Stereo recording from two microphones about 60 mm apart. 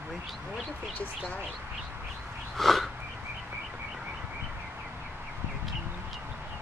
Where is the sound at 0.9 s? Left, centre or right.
Left.